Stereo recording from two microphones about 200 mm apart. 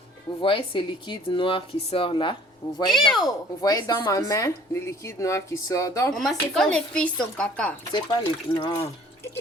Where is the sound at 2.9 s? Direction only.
Centre (ahead or behind).